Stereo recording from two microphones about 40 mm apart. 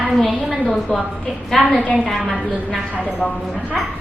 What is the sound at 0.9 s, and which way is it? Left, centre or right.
Speech, centre.